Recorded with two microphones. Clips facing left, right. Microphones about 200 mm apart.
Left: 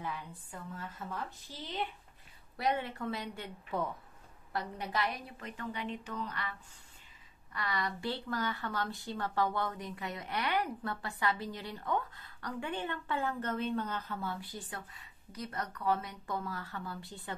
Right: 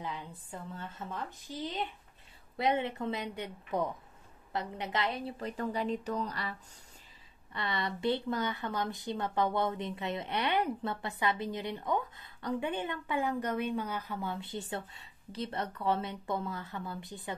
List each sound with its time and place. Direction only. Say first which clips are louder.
0.0 s a woman's voice: right 1 dB; 20° right (ahead or behind)
7.5 s speech: right 1 dB; 25° right (ahead or behind)